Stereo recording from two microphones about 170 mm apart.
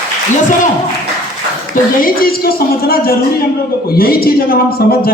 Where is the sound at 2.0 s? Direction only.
60° left (ahead or behind).